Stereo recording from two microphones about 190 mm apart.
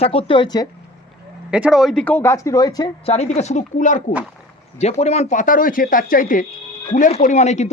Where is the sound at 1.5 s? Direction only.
5° right (ahead or behind); by 2.8 s 20° left (ahead or behind).